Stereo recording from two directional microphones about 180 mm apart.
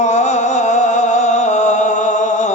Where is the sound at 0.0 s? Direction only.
40° left (ahead or behind).